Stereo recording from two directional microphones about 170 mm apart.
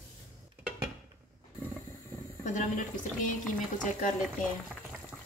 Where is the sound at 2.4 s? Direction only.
45° left (ahead or behind).